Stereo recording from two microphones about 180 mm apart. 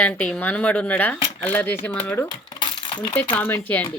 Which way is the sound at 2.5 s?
25° left (ahead or behind).